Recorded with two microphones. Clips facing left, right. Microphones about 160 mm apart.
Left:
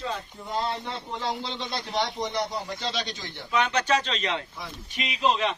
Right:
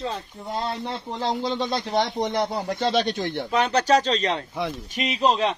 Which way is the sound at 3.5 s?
35° right (ahead or behind).